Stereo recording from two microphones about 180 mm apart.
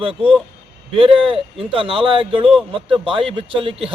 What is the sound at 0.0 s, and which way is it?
A man's voice, 30° right (ahead or behind).